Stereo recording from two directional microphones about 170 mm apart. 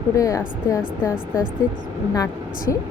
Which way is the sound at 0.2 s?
20° left (ahead or behind).